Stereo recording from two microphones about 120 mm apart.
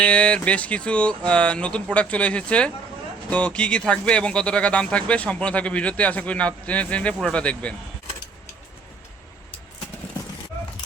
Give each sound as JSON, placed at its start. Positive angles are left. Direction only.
{"t": 0.0, "sound": "speech", "side_deg": 10}